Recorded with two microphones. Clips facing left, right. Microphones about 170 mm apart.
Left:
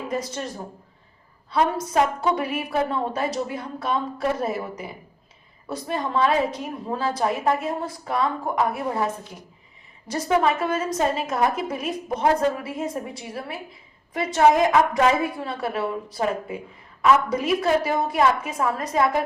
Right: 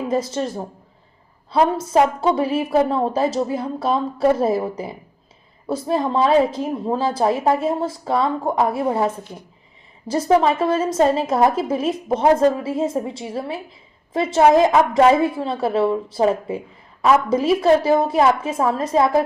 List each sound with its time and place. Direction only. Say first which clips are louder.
0.1 s a woman's voice: right 7 dB; 30° right (ahead or behind)
5.6 s a woman's voice: right 7 dB; 30° right (ahead or behind)